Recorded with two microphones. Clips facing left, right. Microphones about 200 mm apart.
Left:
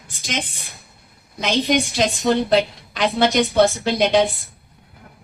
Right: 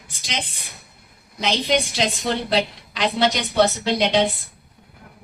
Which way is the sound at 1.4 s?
50° left (ahead or behind).